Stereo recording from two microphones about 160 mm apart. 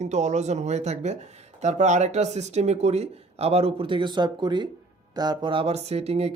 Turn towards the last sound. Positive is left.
turn(degrees=-40)  # may be behind; listen again after turning